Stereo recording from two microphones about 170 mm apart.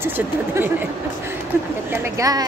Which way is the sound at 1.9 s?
15° right (ahead or behind).